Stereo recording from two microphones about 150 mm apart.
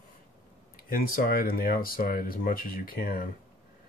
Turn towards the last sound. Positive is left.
turn(degrees=70)  # may be behind; listen again after turning